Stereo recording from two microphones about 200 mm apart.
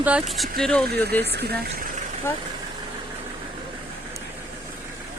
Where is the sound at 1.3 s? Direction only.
55° right (ahead or behind).